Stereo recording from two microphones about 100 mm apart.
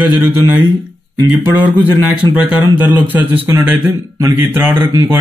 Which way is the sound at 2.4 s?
15° right (ahead or behind).